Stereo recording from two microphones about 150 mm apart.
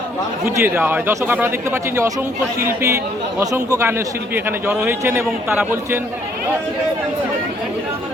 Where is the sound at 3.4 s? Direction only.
25° right (ahead or behind).